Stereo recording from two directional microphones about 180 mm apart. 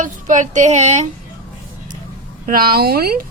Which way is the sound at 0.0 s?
45° right (ahead or behind).